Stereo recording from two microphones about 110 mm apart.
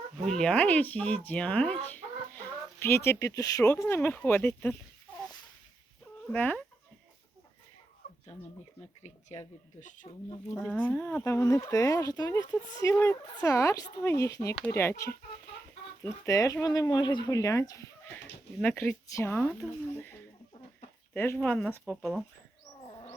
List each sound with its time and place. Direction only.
0.3 s speech: 5° left (ahead or behind)
6.3 s speech: 15° left (ahead or behind)
9.0 s speech: 85° left
10.5 s speech: 20° left (ahead or behind)
19.0 s speech: 25° left (ahead or behind)
22.9 s wild animals: 50° left (ahead or behind)